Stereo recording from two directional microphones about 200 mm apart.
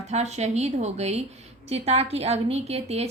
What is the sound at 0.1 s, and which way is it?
A woman's voice, 35° right (ahead or behind).